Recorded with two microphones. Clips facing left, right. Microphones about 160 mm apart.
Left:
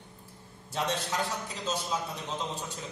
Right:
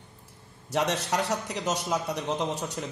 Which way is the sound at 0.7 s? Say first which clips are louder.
Right 5 dB; 75° right (ahead or behind).